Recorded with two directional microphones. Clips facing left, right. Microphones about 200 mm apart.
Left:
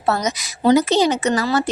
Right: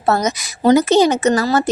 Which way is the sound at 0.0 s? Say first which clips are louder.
Right 3 dB; 45° right (ahead or behind).